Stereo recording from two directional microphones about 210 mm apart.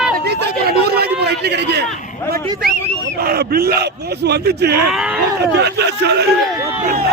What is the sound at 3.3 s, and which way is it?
Speech, 50° right (ahead or behind).